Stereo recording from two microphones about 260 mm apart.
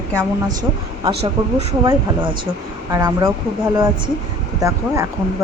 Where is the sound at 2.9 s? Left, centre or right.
Centre.